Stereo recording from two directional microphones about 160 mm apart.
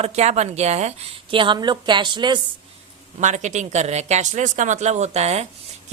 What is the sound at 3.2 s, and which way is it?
Speech, 50° right (ahead or behind).